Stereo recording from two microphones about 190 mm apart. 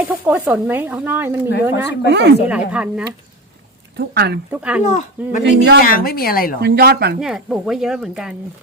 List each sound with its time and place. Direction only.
0.3 s speech: 10° right (ahead or behind)
2.0 s speech: 60° right (ahead or behind)
2.5 s speech: 5° right (ahead or behind)
3.9 s speech: 55° right (ahead or behind)
4.5 s speech: 5° right (ahead or behind)
4.8 s speech: 40° left (ahead or behind)
5.4 s speech: 65° right (ahead or behind)
5.9 s speech: 50° left (ahead or behind)
6.6 s speech: 55° right (ahead or behind)
7.2 s speech: 5° right (ahead or behind)